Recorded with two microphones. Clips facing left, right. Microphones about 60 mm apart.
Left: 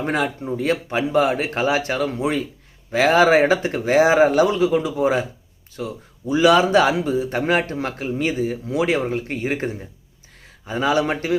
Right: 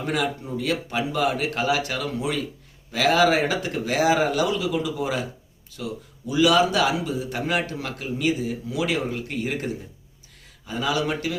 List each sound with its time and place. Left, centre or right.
0.0 s a man's voice: left